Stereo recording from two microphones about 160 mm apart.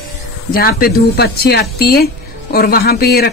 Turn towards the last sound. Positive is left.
turn(degrees=75)  # may be behind; listen again after turning